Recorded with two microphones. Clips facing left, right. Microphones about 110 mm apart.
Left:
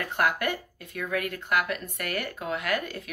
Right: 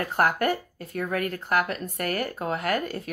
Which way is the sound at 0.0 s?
40° right (ahead or behind).